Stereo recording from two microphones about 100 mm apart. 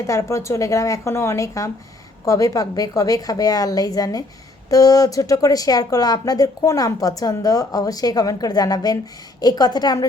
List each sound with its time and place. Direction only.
0.1 s speech: 30° left (ahead or behind)